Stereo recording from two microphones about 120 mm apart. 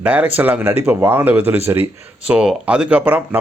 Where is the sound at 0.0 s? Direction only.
10° right (ahead or behind).